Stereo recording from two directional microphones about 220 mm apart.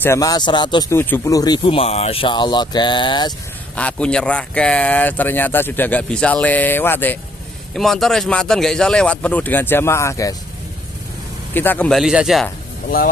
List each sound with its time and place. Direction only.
0.0 s speech: 15° left (ahead or behind)
3.7 s speech: 5° left (ahead or behind)
11.5 s speech: 10° left (ahead or behind)